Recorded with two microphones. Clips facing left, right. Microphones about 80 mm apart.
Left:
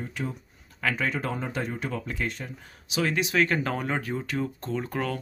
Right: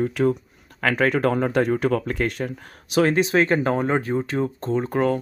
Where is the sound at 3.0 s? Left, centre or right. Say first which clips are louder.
Right 6 dB; right.